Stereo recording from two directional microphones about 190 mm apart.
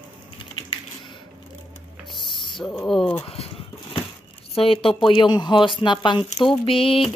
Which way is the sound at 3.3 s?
30° left (ahead or behind).